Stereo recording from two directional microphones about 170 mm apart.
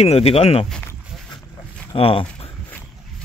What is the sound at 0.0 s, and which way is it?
Speech, 35° left (ahead or behind).